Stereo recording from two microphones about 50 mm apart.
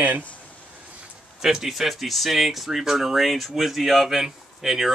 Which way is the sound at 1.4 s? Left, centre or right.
Centre.